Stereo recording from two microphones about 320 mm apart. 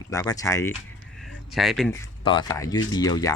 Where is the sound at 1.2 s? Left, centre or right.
Centre.